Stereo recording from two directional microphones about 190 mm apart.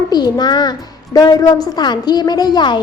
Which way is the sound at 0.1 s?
20° left (ahead or behind).